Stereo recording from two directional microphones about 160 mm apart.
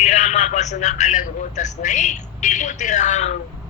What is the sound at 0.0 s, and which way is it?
A man's voice, 45° left (ahead or behind).